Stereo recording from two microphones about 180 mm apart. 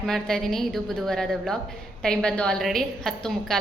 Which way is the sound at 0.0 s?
Centre (ahead or behind).